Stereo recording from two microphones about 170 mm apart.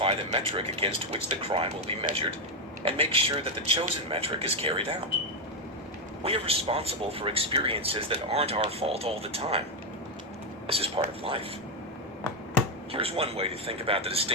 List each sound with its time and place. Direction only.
0.0 s a man's voice: 35° right (ahead or behind)
6.2 s a man's voice: 35° right (ahead or behind)
10.7 s a man's voice: 35° right (ahead or behind)
12.9 s a man's voice: 35° right (ahead or behind)